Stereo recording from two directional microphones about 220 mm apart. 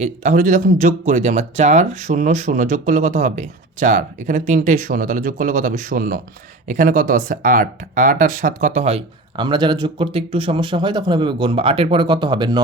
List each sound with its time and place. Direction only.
0.0 s speech: 35° right (ahead or behind)